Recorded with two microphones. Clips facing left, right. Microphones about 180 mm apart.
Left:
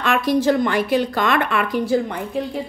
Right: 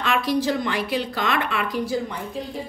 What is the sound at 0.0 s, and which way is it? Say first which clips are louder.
Speech: left 4 dB; 50° left (ahead or behind).